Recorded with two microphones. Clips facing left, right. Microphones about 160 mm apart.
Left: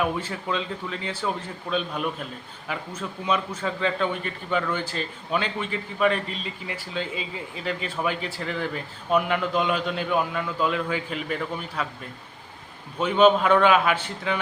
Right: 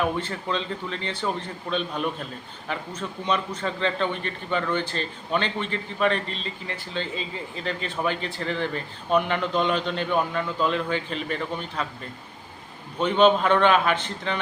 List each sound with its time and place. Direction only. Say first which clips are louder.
0.0 s a man's voice: even; 5° left (ahead or behind)
13.0 s a man's voice: left 1 dB; 5° left (ahead or behind)